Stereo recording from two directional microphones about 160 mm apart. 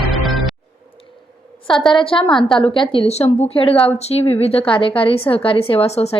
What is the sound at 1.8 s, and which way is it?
A woman's voice, 35° left (ahead or behind).